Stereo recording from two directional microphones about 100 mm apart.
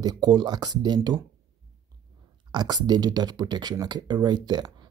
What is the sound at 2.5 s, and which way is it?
Speech, 45° right (ahead or behind).